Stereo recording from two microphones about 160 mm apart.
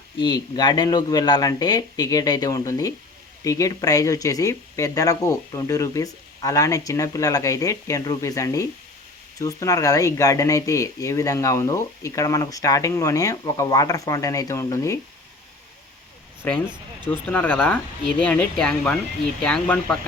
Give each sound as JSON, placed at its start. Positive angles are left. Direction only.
{"t": 0.2, "sound": "speech", "side_deg": 25}
{"t": 16.4, "sound": "speech", "side_deg": 10}